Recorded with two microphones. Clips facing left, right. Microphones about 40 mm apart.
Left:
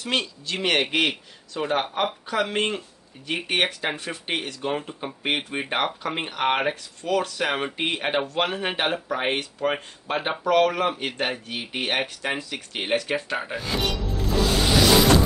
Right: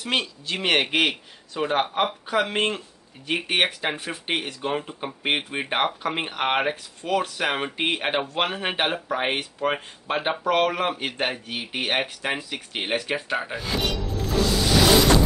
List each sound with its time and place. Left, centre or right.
0.0 s speech: centre